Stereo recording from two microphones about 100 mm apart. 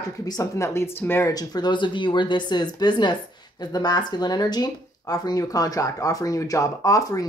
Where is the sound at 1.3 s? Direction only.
45° left (ahead or behind).